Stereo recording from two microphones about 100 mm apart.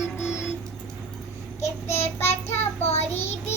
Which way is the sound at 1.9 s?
90° left.